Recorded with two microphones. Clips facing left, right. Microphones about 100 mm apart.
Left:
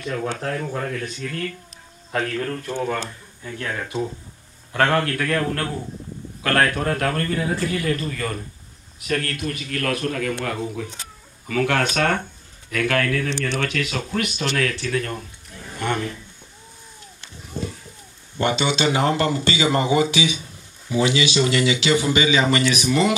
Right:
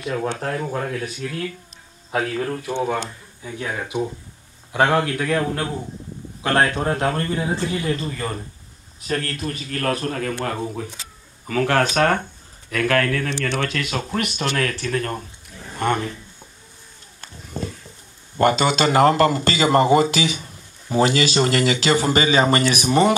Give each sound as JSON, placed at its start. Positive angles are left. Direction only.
{"t": 0.4, "sound": "a man's voice", "side_deg": -5}
{"t": 13.4, "sound": "speech", "side_deg": -50}
{"t": 18.4, "sound": "speech", "side_deg": -45}